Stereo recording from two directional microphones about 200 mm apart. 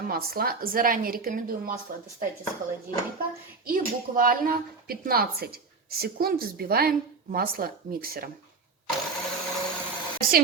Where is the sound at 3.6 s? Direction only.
45° right (ahead or behind).